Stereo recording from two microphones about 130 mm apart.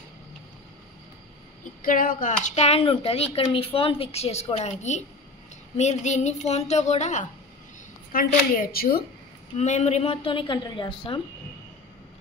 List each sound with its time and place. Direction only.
1.8 s speech: 90° left; by 2.6 s 75° left (ahead or behind)
2.6 s a woman's voice: 50° left (ahead or behind); by 7.2 s 65° left (ahead or behind)
8.1 s speech: 90° left
9.6 s a woman's voice: 60° left (ahead or behind); by 11.1 s 40° left (ahead or behind)